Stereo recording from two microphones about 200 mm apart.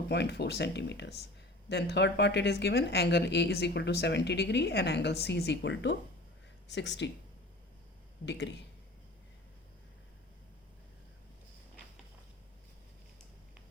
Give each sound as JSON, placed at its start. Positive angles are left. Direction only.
{"t": 0.1, "sound": "speech", "side_deg": 55}
{"t": 8.2, "sound": "speech", "side_deg": 60}